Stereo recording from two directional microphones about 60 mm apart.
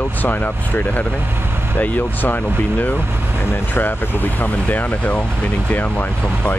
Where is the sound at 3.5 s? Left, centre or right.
Left.